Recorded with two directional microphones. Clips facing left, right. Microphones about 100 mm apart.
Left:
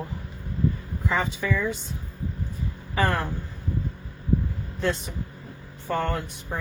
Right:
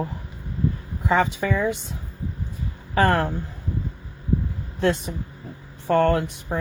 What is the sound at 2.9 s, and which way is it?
Speech, 60° right (ahead or behind).